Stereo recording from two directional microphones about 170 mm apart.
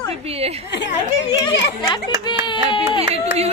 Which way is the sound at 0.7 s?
90° left.